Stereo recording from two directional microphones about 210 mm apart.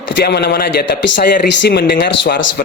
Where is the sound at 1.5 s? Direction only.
55° left (ahead or behind).